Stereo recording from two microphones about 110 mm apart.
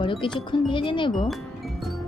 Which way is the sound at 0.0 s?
50° left (ahead or behind).